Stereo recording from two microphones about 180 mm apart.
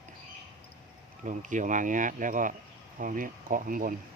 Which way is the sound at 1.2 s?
45° right (ahead or behind).